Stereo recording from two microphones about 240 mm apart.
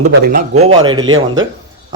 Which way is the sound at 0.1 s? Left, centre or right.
Right.